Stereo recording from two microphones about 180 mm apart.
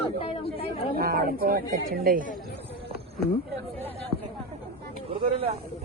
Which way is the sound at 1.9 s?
55° right (ahead or behind).